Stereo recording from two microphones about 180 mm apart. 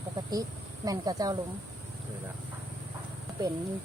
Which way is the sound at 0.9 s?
20° right (ahead or behind).